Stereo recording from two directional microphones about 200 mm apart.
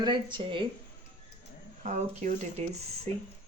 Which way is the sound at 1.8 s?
35° right (ahead or behind).